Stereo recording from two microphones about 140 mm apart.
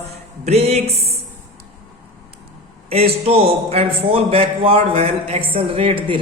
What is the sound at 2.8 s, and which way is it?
A woman's voice, 45° right (ahead or behind).